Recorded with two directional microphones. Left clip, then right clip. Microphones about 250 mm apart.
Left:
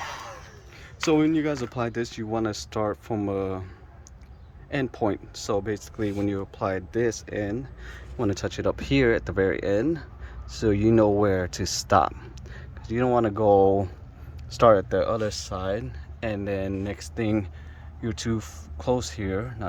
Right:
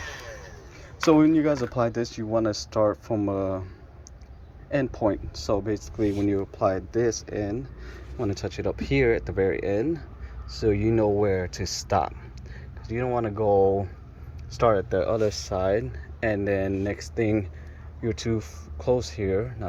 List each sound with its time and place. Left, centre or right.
1.0 s speech: centre
4.9 s speech: centre
6.9 s speech: left
7.3 s speech: centre
7.6 s a sound: left
8.3 s speech: centre
12.5 s a sound: left
14.5 s speech: left